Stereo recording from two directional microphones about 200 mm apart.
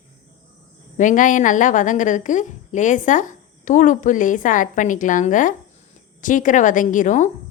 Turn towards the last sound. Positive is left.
turn(degrees=40)  # may be behind; listen again after turning